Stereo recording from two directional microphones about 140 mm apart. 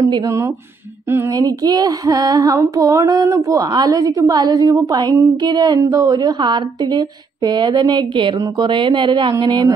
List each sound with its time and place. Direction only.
0.0 s female singing: 20° right (ahead or behind)